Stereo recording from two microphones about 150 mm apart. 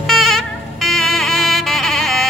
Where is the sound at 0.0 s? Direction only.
Centre (ahead or behind).